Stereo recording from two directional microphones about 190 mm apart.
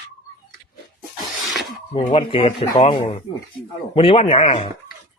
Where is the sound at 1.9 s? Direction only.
30° left (ahead or behind).